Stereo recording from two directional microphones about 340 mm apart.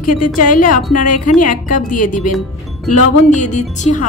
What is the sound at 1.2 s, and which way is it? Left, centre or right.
Speech, left.